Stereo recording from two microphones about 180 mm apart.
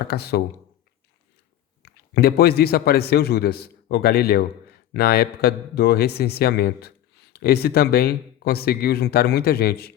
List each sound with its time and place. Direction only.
0.0 s a man's voice: 60° left (ahead or behind)
1.8 s a man's voice: 65° left (ahead or behind)